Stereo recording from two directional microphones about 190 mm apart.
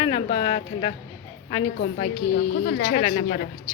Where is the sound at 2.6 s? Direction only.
55° left (ahead or behind).